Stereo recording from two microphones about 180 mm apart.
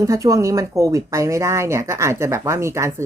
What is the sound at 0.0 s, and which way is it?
Speech, 15° right (ahead or behind).